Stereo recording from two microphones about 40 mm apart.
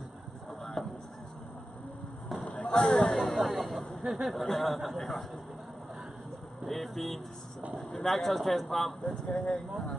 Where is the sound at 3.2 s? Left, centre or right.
Centre.